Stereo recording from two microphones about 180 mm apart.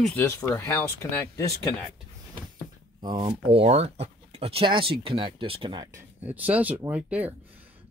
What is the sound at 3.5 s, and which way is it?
Speech, 35° right (ahead or behind).